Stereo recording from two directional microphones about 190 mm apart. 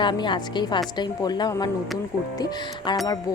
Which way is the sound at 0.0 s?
25° left (ahead or behind).